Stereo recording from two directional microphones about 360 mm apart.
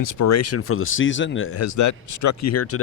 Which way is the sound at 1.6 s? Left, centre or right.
Left.